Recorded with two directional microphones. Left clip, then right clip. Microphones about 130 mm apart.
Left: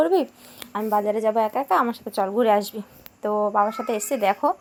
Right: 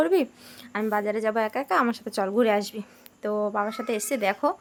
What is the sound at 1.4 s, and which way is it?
A woman's voice, 45° right (ahead or behind).